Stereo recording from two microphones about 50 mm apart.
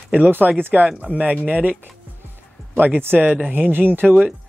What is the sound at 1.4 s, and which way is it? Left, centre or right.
Speech, right.